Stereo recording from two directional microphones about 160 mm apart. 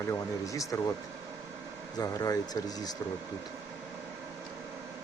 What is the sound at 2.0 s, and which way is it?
Speech, 25° left (ahead or behind).